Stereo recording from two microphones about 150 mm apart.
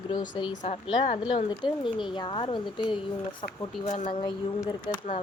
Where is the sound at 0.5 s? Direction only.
55° left (ahead or behind).